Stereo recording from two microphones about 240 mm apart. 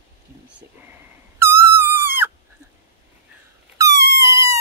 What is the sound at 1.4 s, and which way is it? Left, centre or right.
Owl, centre.